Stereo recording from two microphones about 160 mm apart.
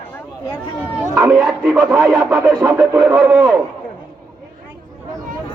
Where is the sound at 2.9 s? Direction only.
25° right (ahead or behind).